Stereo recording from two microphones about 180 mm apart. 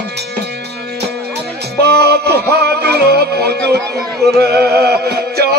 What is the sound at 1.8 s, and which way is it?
Music, 65° right (ahead or behind).